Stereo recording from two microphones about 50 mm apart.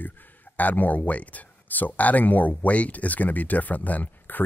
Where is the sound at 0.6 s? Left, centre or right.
Left.